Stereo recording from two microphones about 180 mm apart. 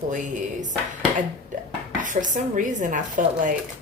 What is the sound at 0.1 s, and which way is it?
Speech, 45° right (ahead or behind).